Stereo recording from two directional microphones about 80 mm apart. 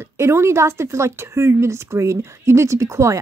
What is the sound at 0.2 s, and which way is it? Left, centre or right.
Speech, right.